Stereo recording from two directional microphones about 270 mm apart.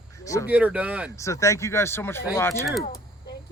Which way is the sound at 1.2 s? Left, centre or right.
Centre.